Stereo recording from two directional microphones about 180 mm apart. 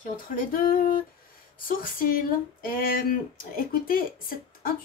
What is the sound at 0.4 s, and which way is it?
Speech, 50° left (ahead or behind).